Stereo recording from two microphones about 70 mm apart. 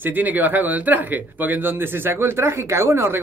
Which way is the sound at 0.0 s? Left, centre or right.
Right.